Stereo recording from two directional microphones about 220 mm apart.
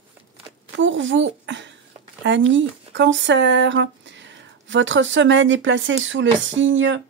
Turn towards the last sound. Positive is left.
turn(degrees=-60)  # may be behind; listen again after turning